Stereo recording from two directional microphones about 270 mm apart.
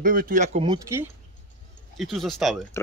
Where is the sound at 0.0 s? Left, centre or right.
Right.